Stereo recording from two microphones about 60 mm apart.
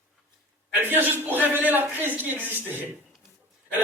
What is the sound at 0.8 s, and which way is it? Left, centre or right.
A man's voice, right.